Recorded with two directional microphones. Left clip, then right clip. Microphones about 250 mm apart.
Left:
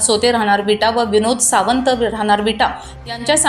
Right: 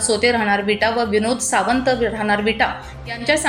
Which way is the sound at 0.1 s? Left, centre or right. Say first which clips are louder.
Left 3 dB; centre.